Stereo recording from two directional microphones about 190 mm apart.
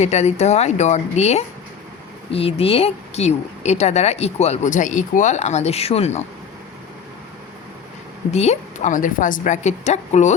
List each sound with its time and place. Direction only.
0.0 s speech: 35° left (ahead or behind)
8.3 s speech: 35° left (ahead or behind)